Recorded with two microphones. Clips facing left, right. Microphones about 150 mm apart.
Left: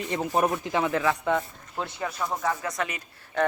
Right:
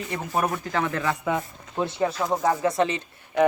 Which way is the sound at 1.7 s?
25° right (ahead or behind).